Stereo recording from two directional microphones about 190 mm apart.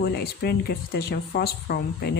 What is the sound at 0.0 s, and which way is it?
Speech, 55° left (ahead or behind).